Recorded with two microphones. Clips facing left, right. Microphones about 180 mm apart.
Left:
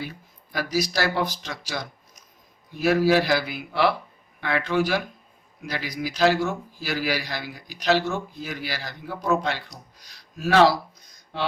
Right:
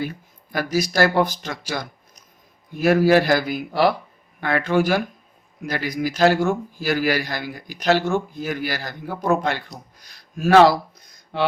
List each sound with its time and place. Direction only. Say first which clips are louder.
0.5 s a man's voice: right 4 dB; 50° right (ahead or behind)